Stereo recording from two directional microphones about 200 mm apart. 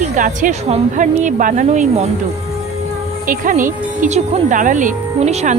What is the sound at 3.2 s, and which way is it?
A woman's voice, 45° right (ahead or behind).